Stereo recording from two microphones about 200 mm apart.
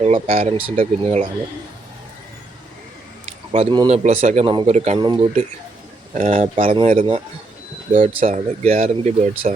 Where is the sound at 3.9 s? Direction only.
35° right (ahead or behind).